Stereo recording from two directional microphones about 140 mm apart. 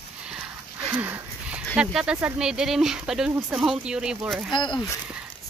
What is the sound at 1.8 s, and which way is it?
Speech, 5° right (ahead or behind).